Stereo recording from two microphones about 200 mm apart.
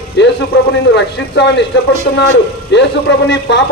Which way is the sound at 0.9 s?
60° left (ahead or behind).